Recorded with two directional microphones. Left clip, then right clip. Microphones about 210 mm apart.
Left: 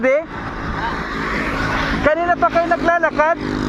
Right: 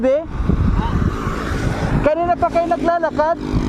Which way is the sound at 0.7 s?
35° right (ahead or behind).